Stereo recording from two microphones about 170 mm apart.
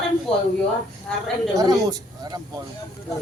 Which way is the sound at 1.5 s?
20° right (ahead or behind).